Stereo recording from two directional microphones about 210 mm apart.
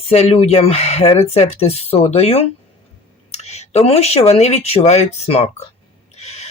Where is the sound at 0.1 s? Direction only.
30° left (ahead or behind).